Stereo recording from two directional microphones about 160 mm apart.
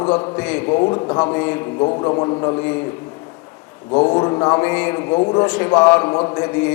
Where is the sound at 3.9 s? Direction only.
30° left (ahead or behind).